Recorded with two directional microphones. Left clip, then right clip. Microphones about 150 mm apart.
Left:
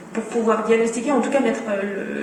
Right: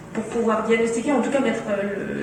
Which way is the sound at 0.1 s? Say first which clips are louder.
Left 2 dB; 40° left (ahead or behind).